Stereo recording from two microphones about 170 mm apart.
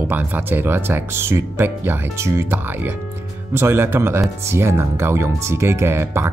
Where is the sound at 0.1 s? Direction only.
10° right (ahead or behind).